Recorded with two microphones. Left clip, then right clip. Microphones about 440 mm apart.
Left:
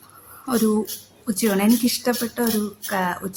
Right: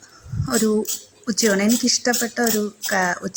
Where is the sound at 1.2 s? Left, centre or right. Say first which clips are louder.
Right 2 dB; left.